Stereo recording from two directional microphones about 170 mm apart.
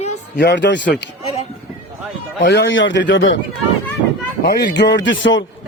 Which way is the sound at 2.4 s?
90° left.